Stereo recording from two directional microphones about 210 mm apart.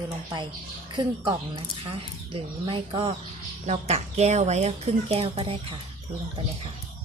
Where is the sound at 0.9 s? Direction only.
20° right (ahead or behind).